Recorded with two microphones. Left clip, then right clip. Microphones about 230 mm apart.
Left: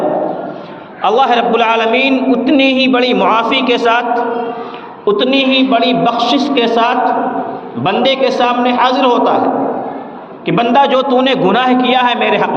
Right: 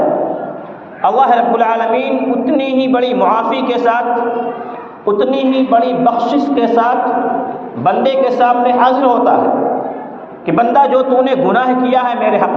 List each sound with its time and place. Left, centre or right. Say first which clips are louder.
1.0 s a man's voice: even; left
10.4 s a man's voice: even; left